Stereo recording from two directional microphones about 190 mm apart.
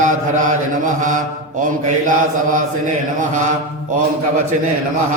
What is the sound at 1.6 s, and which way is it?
A man's voice, 40° right (ahead or behind).